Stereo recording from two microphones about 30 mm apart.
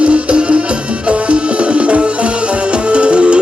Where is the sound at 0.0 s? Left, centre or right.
Right.